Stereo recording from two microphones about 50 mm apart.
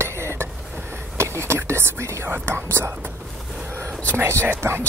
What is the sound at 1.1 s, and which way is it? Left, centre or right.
Speech, right.